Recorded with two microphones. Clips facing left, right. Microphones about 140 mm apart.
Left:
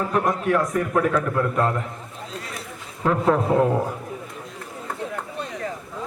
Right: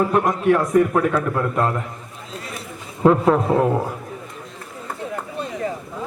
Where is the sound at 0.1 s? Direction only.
30° right (ahead or behind).